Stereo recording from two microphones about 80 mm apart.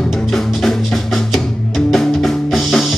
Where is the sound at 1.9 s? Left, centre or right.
Centre.